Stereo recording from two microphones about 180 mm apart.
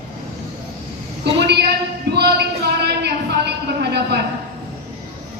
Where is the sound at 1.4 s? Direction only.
65° right (ahead or behind).